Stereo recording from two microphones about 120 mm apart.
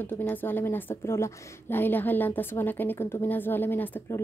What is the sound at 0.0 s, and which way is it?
A woman's voice, 15° left (ahead or behind).